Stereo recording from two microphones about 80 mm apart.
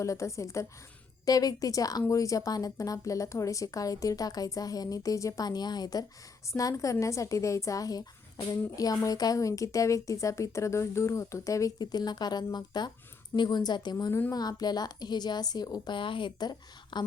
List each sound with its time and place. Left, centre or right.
0.0 s speech: left
1.2 s speech: left
6.5 s speech: left
11.8 s a woman's voice: left
13.9 s speech: left
14.3 s a woman's voice: left